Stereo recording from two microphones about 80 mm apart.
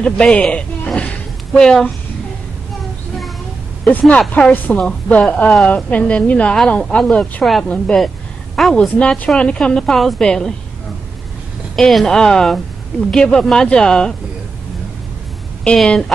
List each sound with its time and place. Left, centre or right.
0.0 s a sound: centre
4.4 s a woman's voice: centre
11.7 s a woman's voice: centre
15.6 s a woman's voice: centre